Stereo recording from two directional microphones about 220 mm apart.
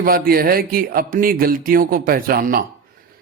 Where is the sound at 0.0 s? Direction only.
45° right (ahead or behind).